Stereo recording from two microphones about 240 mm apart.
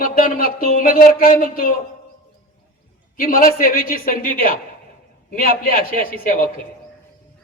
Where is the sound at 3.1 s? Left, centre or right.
Left.